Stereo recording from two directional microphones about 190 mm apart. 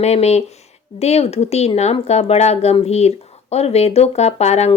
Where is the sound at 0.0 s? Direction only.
35° left (ahead or behind).